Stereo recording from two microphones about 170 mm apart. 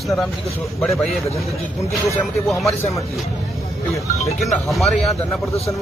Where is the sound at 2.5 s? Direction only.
Centre (ahead or behind).